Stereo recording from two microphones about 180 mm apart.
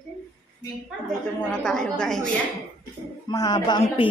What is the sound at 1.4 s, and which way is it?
Speech, 5° left (ahead or behind).